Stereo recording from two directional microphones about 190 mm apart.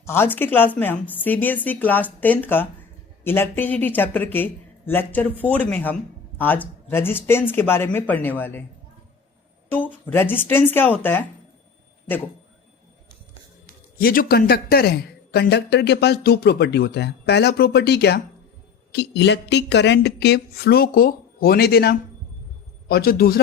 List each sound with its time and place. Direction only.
0.0 s a woman's voice: 10° left (ahead or behind)
9.6 s a woman's voice: 10° left (ahead or behind)
14.0 s a woman's voice: 50° left (ahead or behind)